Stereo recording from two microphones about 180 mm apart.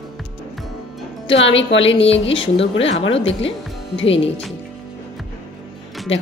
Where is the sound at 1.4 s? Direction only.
90° left.